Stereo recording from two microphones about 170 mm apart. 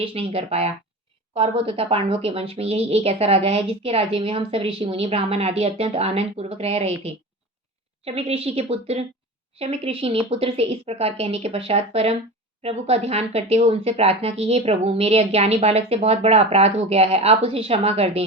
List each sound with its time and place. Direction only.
0.0 s speech: 35° right (ahead or behind)